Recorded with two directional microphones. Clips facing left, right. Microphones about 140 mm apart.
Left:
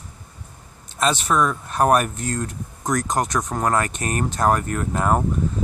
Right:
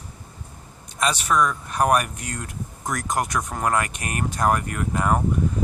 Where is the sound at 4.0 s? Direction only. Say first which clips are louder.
Left 5 dB; 40° left (ahead or behind).